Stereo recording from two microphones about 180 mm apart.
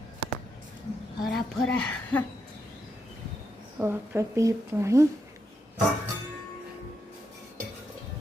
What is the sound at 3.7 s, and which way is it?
Speech, 15° right (ahead or behind).